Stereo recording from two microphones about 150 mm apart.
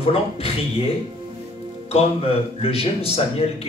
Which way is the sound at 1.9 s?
40° left (ahead or behind).